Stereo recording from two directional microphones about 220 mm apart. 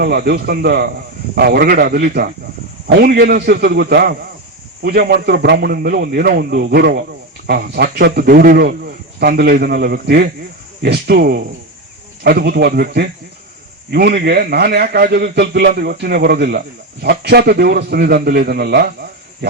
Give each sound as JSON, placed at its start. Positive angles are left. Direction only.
{"t": 0.0, "sound": "a man's voice", "side_deg": -45}